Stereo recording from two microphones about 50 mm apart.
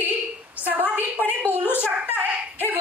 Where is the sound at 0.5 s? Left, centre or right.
Right.